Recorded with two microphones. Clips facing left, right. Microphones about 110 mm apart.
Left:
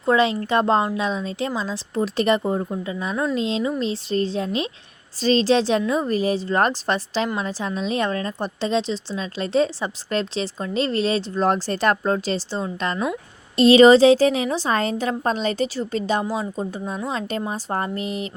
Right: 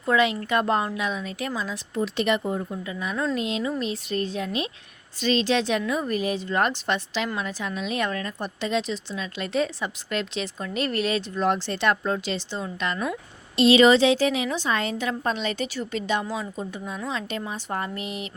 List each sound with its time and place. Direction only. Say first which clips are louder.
0.0 s a woman's voice: left 3 dB; 30° left (ahead or behind)
2.0 s a woman's voice: left 4 dB; 40° left (ahead or behind)